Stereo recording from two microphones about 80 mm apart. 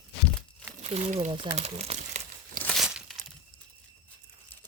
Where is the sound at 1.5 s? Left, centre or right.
Right.